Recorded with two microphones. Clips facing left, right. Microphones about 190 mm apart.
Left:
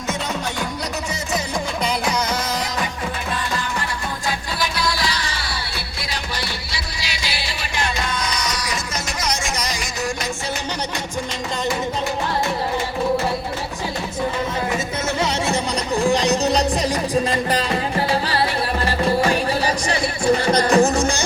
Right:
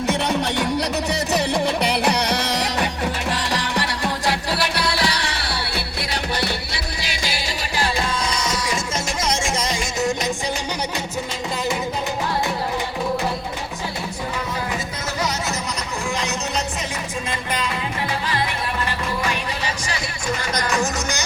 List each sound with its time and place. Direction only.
1.3 s music: 65° right (ahead or behind)
3.3 s music: 85° right; by 5.8 s 65° right (ahead or behind)
6.4 s music: 55° right (ahead or behind)
8.3 s music: 25° right (ahead or behind)
15.2 s music: 30° left (ahead or behind)